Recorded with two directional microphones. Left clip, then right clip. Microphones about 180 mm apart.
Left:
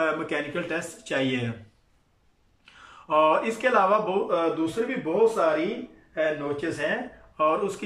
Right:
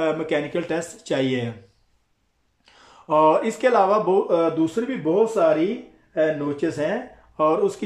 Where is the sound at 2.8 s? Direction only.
25° right (ahead or behind).